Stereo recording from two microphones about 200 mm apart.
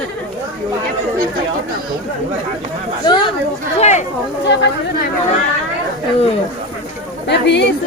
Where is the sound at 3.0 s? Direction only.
20° left (ahead or behind).